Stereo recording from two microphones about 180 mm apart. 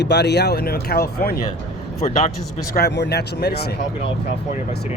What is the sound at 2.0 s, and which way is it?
Speech, 40° left (ahead or behind).